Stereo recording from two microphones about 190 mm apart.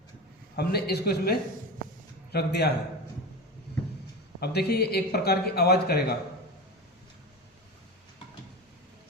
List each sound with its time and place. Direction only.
0.5 s a man's voice: 55° left (ahead or behind)
4.4 s a man's voice: 60° left (ahead or behind)